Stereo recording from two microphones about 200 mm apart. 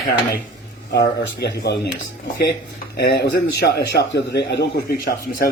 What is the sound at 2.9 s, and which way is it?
A man's voice, 55° left (ahead or behind).